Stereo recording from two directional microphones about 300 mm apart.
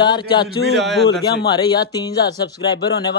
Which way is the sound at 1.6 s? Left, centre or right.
Centre.